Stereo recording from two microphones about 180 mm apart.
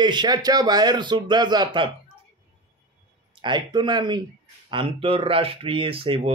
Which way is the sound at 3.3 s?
25° right (ahead or behind).